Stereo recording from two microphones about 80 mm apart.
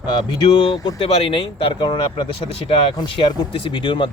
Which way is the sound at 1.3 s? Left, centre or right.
Left.